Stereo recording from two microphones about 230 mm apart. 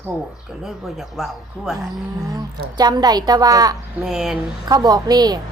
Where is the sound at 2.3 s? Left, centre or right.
Centre.